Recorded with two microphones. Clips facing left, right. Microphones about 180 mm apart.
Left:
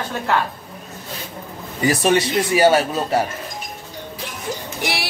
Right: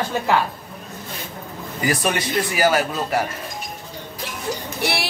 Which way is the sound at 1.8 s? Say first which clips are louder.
Left 5 dB; 25° left (ahead or behind).